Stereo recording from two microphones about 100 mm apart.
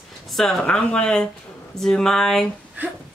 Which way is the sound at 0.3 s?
5° left (ahead or behind).